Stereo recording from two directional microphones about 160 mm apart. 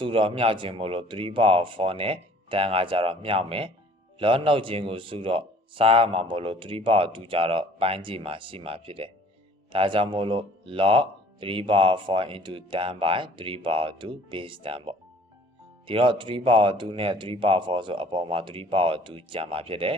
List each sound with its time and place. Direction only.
0.0 s speech: 35° right (ahead or behind)